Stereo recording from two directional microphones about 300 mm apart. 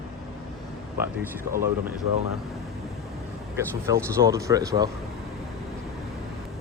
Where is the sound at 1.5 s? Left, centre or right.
Centre.